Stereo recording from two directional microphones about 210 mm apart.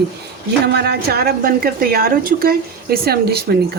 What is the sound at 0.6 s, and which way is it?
A woman's voice, 50° right (ahead or behind).